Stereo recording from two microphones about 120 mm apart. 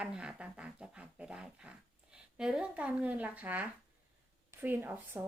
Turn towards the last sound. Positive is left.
turn(degrees=-15)  # may be behind; listen again after turning